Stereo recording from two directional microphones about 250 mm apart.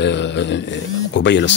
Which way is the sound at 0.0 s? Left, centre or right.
Left.